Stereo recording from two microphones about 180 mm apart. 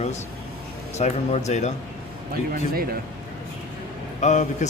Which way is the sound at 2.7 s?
55° right (ahead or behind).